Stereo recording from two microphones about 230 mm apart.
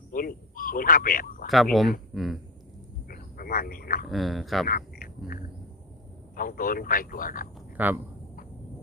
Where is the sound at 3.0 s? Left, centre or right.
Left.